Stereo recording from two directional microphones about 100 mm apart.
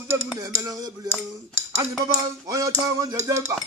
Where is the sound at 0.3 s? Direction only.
35° right (ahead or behind).